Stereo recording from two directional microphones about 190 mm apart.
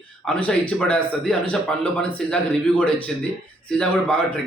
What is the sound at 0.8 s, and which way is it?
A man's voice, 5° left (ahead or behind).